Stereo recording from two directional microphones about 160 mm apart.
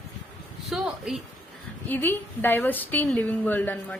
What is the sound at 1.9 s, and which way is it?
A woman's voice, 10° left (ahead or behind).